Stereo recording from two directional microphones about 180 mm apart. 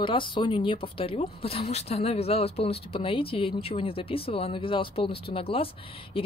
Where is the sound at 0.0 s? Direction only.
25° left (ahead or behind).